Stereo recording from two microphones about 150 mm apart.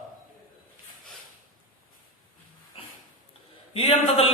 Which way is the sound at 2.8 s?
40° left (ahead or behind).